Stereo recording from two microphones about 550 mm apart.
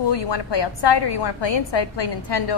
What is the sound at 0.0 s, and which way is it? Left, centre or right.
A woman's voice, left.